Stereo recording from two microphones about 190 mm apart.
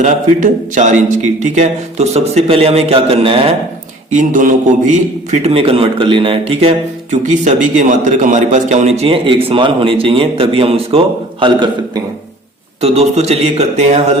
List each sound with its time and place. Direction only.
0.0 s a man's voice: 40° right (ahead or behind)
4.2 s a man's voice: 45° right (ahead or behind); by 12.0 s 25° right (ahead or behind)
12.8 s a man's voice: 35° right (ahead or behind)